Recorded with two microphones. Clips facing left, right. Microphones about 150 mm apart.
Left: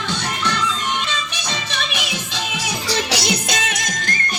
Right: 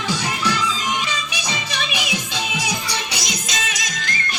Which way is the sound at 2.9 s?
70° left (ahead or behind).